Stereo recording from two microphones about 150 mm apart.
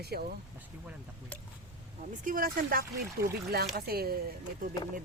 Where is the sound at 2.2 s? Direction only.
70° right (ahead or behind); by 4.2 s 90° right.